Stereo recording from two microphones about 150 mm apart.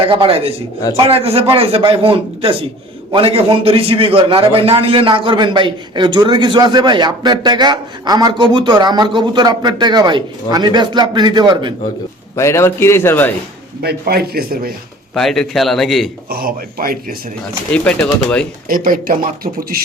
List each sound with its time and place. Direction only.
0.0 s a man's voice: 35° right (ahead or behind)
12.4 s a man's voice: 20° left (ahead or behind)
13.8 s a man's voice: 90° right
15.1 s a man's voice: 5° left (ahead or behind)
16.3 s speech: 75° right (ahead or behind)
17.7 s a man's voice: 5° left (ahead or behind)
18.7 s speech: 70° right (ahead or behind)